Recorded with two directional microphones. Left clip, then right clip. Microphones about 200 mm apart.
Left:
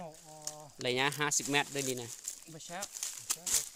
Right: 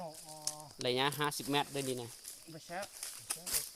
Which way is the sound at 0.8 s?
10° left (ahead or behind).